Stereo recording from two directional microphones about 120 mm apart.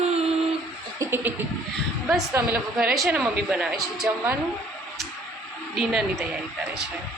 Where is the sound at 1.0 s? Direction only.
15° right (ahead or behind).